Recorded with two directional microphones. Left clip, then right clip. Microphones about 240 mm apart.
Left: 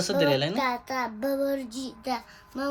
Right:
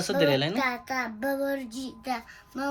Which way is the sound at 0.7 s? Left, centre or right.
Left.